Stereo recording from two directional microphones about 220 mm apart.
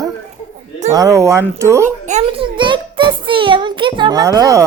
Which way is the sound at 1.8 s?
30° right (ahead or behind).